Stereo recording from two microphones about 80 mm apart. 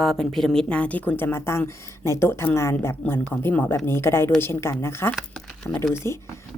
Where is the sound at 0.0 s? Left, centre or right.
Centre; by 3.2 s left.